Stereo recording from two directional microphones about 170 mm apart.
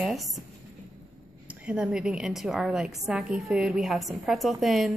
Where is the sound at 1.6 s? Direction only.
5° right (ahead or behind).